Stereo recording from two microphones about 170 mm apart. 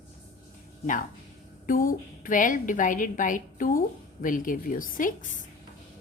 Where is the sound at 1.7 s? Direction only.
55° left (ahead or behind).